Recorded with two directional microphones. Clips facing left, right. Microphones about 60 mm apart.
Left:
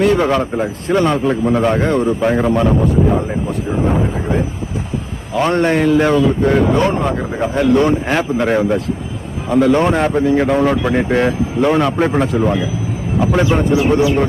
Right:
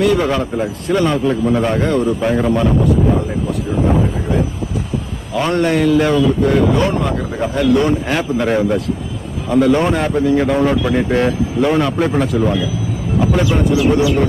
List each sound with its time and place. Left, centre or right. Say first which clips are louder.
0.0 s speech: left 1 dB; left
5.3 s speech: left 1 dB; left